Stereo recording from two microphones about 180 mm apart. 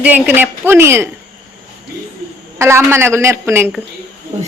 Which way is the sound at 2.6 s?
15° right (ahead or behind).